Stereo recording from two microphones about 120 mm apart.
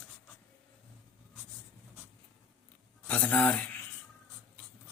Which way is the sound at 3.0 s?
10° left (ahead or behind).